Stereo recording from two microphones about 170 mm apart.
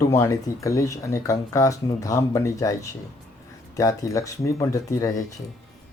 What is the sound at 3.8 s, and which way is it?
Speech, 20° left (ahead or behind).